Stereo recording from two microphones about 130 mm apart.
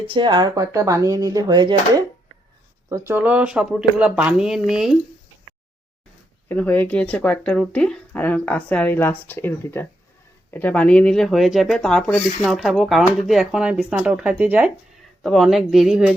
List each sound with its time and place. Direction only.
0.1 s speech: 40° right (ahead or behind)
2.9 s speech: 20° right (ahead or behind); by 4.9 s 5° right (ahead or behind)
6.5 s speech: 15° left (ahead or behind); by 14.7 s 15° right (ahead or behind)
15.2 s speech: centre (ahead or behind)